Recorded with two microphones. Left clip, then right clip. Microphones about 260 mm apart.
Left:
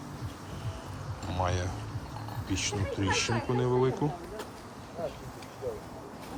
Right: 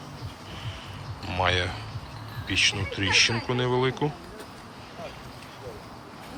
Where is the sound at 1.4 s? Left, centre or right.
Centre.